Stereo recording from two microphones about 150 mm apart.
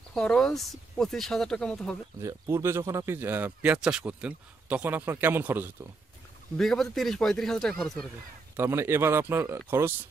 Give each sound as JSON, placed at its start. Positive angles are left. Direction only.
{"t": 0.1, "sound": "speech", "side_deg": 5}
{"t": 2.2, "sound": "speech", "side_deg": -20}
{"t": 6.5, "sound": "speech", "side_deg": 5}
{"t": 8.5, "sound": "speech", "side_deg": -15}